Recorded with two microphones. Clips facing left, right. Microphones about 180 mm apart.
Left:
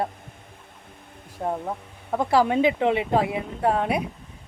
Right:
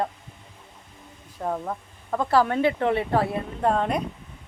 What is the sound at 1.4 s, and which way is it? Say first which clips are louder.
Speech: left 1 dB; 5° left (ahead or behind).